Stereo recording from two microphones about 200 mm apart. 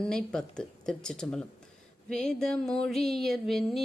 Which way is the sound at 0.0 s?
5° left (ahead or behind).